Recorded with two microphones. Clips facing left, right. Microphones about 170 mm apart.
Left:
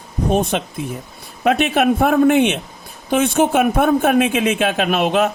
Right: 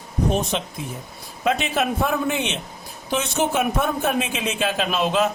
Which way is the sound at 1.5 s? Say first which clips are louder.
Left 7 dB; 60° left (ahead or behind).